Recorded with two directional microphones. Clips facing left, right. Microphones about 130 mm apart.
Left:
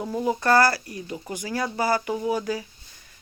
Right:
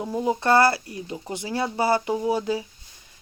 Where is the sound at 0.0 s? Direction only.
20° right (ahead or behind).